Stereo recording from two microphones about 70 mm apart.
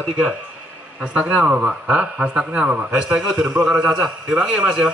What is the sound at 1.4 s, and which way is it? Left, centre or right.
A man's voice, centre.